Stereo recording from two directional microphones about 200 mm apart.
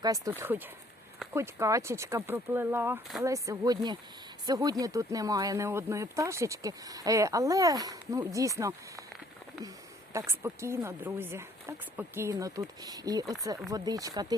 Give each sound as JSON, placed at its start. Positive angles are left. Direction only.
{"t": 0.0, "sound": "speech", "side_deg": -15}